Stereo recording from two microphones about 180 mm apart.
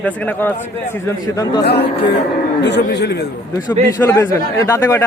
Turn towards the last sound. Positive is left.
turn(degrees=15)  # may be behind; listen again after turning